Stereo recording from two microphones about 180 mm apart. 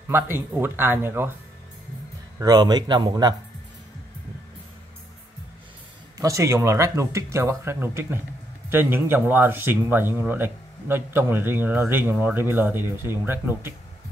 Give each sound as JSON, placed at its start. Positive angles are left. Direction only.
{"t": 0.1, "sound": "speech", "side_deg": -10}
{"t": 2.3, "sound": "speech", "side_deg": -20}
{"t": 6.1, "sound": "speech", "side_deg": -15}